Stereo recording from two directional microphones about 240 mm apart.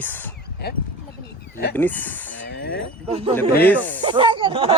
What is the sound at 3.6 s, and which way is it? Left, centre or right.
Speech, centre.